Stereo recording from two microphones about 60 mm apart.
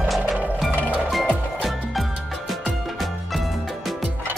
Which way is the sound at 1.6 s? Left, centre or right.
Centre.